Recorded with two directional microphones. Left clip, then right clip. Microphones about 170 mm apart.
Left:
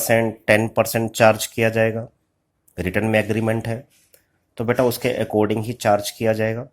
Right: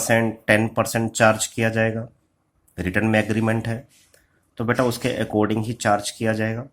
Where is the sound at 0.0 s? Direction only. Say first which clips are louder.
Left 2 dB; 30° left (ahead or behind).